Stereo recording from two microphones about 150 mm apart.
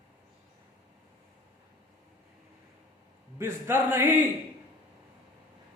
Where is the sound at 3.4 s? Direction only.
15° right (ahead or behind).